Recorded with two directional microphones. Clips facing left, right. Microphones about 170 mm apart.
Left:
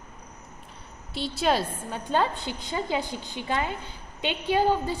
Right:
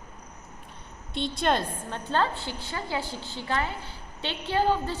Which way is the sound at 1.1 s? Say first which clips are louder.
Left 1 dB; 5° left (ahead or behind).